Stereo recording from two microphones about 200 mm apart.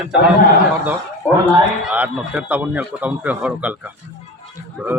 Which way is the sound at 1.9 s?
10° right (ahead or behind).